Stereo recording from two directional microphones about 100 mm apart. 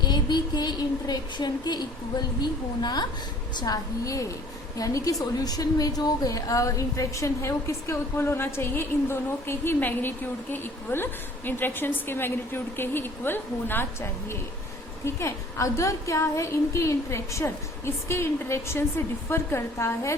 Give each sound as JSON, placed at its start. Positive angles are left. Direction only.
{"t": 0.0, "sound": "a woman's voice", "side_deg": 45}